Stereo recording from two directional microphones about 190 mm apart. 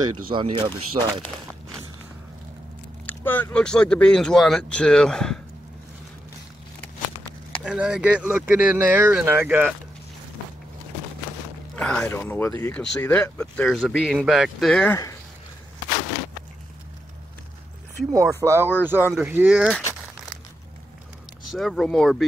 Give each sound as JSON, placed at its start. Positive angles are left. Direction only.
{"t": 0.3, "sound": "speech", "side_deg": -25}
{"t": 3.1, "sound": "speech", "side_deg": 10}
{"t": 7.6, "sound": "speech", "side_deg": -5}
{"t": 11.7, "sound": "speech", "side_deg": 5}
{"t": 18.3, "sound": "speech", "side_deg": -15}
{"t": 19.7, "sound": "crumpling", "side_deg": 10}
{"t": 21.5, "sound": "speech", "side_deg": 0}